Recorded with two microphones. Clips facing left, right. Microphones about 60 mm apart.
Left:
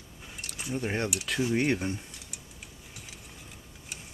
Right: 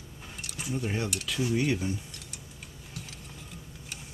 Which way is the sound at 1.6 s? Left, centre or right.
Left.